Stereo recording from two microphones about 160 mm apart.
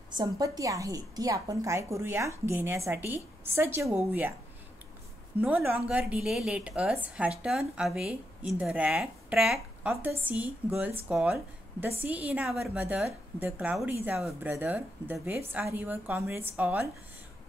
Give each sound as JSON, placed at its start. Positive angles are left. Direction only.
{"t": 0.1, "sound": "a woman's voice", "side_deg": -25}
{"t": 5.4, "sound": "a woman's voice", "side_deg": -10}